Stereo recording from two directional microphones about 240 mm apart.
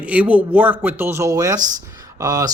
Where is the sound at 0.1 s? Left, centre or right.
Centre.